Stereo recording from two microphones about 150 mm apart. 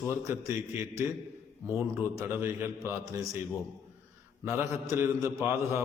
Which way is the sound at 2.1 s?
20° right (ahead or behind).